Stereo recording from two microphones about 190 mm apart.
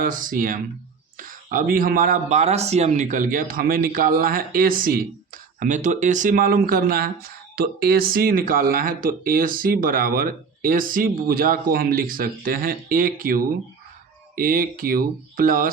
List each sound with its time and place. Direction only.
0.0 s speech: 45° right (ahead or behind)